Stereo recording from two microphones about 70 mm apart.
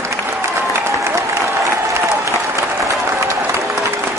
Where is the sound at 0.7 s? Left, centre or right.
Right.